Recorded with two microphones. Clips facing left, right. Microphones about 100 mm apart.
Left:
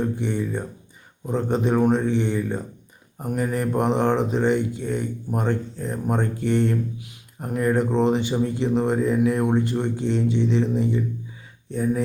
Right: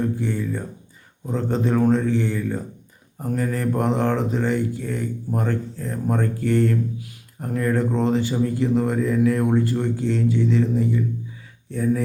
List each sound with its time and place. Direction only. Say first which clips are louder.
0.0 s speech: even; 20° left (ahead or behind)